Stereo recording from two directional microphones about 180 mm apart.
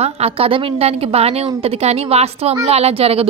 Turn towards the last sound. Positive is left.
turn(degrees=-35)  # may be behind; listen again after turning